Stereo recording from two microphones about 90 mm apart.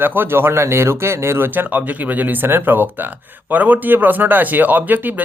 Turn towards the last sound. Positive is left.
turn(degrees=-20)  # may be behind; listen again after turning